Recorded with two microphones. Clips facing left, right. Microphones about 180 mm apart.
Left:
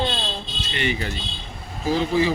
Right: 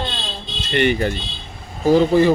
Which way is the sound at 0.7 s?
55° right (ahead or behind).